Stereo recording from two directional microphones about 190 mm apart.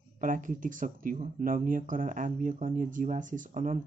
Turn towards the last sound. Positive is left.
turn(degrees=-40)  # may be behind; listen again after turning